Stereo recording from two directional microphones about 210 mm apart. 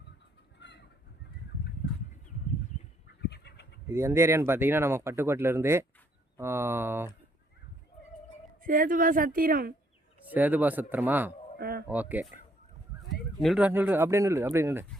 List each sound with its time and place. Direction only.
0.6 s fowl: 55° left (ahead or behind)
3.2 s bird: 50° left (ahead or behind)
3.8 s speech: 15° right (ahead or behind)
8.6 s speech: 40° right (ahead or behind)
10.2 s speech: 10° right (ahead or behind)
11.5 s speech: 50° right (ahead or behind)
11.9 s speech: 5° right (ahead or behind)
13.4 s speech: 5° right (ahead or behind)